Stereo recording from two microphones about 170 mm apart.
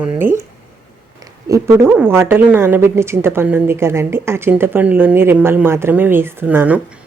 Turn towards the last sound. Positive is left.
turn(degrees=-10)  # may be behind; listen again after turning